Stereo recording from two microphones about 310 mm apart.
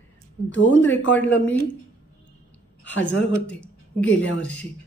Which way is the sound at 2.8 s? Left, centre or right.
Left.